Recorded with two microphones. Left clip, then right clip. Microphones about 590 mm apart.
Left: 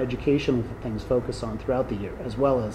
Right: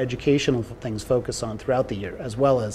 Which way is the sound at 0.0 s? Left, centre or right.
Right.